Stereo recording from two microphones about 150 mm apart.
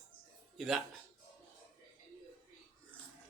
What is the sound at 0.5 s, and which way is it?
Speech, centre (ahead or behind).